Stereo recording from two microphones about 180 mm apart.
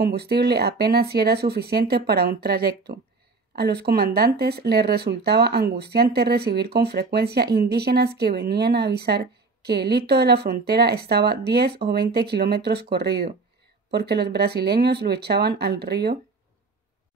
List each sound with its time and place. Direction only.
0.0 s speech: 65° right (ahead or behind)